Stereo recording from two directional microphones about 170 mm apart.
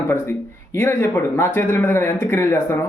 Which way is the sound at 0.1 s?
15° left (ahead or behind).